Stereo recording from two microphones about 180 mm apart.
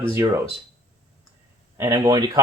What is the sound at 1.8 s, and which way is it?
Speech, 20° right (ahead or behind).